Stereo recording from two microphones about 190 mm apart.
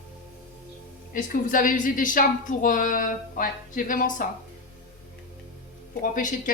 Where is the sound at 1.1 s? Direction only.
45° left (ahead or behind).